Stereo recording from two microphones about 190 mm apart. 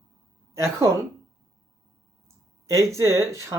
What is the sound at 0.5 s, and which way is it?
Speech, 15° right (ahead or behind).